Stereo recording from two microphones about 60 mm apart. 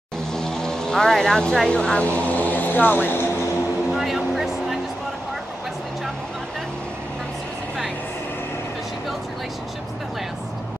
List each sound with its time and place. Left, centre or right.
0.3 s vehicle: centre
1.7 s speech: centre; by 3.3 s left
3.9 s a sound: centre